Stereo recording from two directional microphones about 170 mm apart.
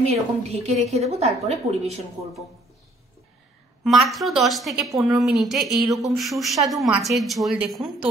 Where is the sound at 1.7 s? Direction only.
20° right (ahead or behind).